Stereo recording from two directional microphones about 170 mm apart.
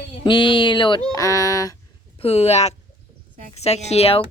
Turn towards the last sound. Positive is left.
turn(degrees=35)  # may be behind; listen again after turning